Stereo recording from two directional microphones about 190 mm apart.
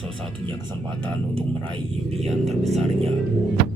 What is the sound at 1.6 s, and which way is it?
Speech, 30° right (ahead or behind).